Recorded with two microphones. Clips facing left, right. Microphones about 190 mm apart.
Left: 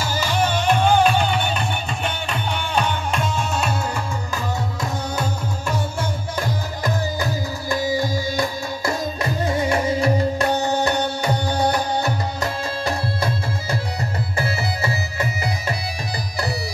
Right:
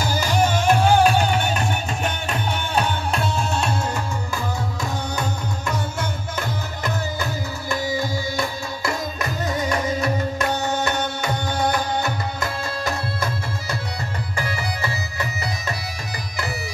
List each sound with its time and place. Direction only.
0.0 s music: 15° right (ahead or behind)
5.7 s music: 10° left (ahead or behind)
7.7 s music: 15° left (ahead or behind)
8.8 s music: 30° left (ahead or behind)